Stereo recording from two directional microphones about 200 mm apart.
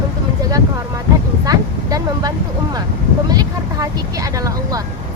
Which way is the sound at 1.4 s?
20° right (ahead or behind).